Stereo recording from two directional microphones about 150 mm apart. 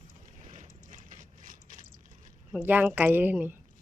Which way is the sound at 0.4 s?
55° right (ahead or behind).